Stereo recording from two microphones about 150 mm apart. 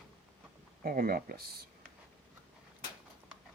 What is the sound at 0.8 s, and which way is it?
Speech, 75° right (ahead or behind).